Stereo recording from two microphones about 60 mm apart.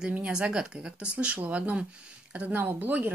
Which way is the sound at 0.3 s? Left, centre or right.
Centre.